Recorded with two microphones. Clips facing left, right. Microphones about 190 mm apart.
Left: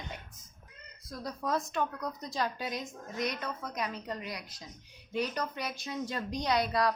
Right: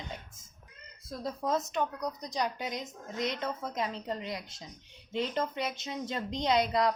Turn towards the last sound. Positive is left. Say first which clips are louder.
# right 2 dB
turn(degrees=-20)  # may be behind; listen again after turning